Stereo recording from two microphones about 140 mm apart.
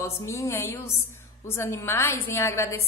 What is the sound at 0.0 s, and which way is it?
A woman's voice, 20° left (ahead or behind).